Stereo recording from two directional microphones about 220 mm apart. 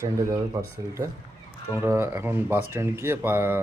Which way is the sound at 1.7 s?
10° right (ahead or behind).